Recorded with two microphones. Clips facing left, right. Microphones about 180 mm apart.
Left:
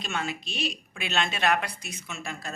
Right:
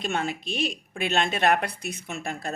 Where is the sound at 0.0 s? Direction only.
55° right (ahead or behind).